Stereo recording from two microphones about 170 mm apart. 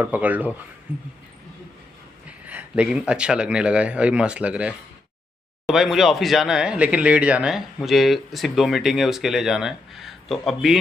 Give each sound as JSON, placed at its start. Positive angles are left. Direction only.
{"t": 0.0, "sound": "speech", "side_deg": -10}
{"t": 2.2, "sound": "speech", "side_deg": -10}